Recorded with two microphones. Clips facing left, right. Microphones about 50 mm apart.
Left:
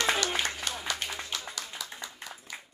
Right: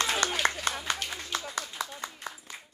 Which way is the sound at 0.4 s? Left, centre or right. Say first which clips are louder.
Right 4 dB; right.